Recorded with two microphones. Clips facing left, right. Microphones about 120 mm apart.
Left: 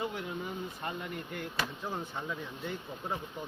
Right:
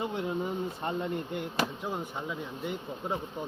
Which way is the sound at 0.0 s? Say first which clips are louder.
Right 5 dB; 25° right (ahead or behind).